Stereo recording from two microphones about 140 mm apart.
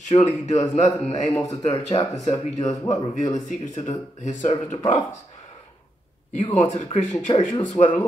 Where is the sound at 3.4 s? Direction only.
60° left (ahead or behind).